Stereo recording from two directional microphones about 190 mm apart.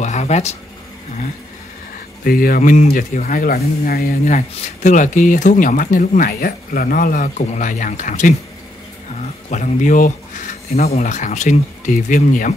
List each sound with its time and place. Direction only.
0.0 s speech: 35° left (ahead or behind)
2.2 s speech: 50° left (ahead or behind)